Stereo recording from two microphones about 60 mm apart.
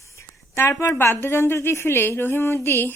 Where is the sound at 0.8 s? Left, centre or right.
Left.